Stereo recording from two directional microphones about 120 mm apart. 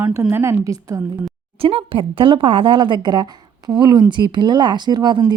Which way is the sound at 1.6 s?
50° right (ahead or behind).